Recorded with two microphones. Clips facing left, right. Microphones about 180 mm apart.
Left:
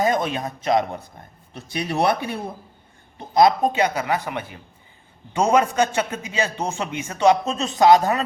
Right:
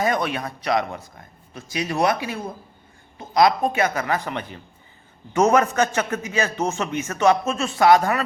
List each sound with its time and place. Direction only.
0.0 s speech: 20° left (ahead or behind)
1.6 s speech: 65° left (ahead or behind)
3.7 s a man's voice: 15° left (ahead or behind)